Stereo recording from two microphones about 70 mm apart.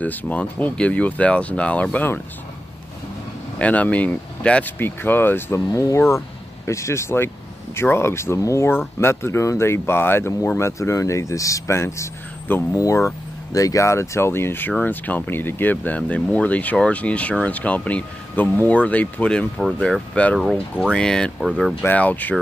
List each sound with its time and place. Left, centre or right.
0.0 s speech: left
3.5 s speech: centre
4.7 s speech: left
5.7 s speech: left
5.9 s speech: left
8.4 s speech: left
8.6 s speech: left
10.6 s speech: left
12.7 s speech: left; by 21.3 s centre
21.8 s speech: left